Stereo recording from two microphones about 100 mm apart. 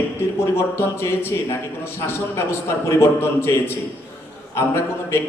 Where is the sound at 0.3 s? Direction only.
25° left (ahead or behind).